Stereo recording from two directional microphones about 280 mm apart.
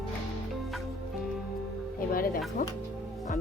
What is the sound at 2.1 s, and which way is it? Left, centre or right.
Speech, left.